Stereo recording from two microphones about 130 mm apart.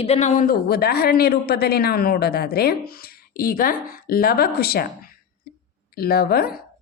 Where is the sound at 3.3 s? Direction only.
90° left.